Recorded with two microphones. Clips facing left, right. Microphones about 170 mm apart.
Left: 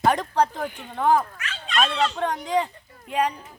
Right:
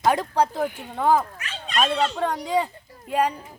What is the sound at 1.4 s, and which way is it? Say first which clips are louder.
Dog: left 1 dB; 35° right (ahead or behind).